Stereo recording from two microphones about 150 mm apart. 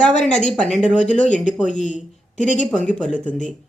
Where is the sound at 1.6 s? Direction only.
55° left (ahead or behind).